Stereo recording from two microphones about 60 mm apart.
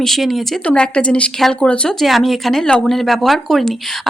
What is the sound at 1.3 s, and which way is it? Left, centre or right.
Speech, centre.